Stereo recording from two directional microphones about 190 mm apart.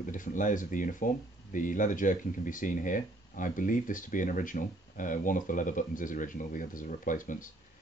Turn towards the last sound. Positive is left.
turn(degrees=45)  # may be behind; listen again after turning